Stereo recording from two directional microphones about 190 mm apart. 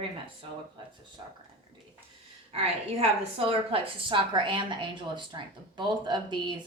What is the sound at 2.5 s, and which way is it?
A woman's voice, 35° right (ahead or behind).